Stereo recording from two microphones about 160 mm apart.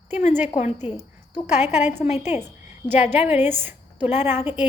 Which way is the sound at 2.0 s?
40° left (ahead or behind).